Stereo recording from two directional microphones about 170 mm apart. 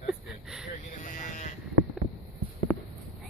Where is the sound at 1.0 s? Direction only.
50° left (ahead or behind).